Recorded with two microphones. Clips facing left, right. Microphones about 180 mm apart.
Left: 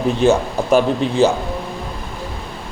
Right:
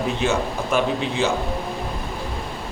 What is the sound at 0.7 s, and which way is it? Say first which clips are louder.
Speech: left 7 dB; 35° left (ahead or behind).